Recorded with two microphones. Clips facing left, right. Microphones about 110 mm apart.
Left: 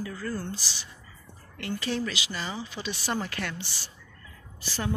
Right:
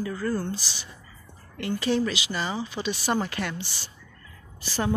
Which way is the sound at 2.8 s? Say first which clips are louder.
Right 4 dB; 15° right (ahead or behind).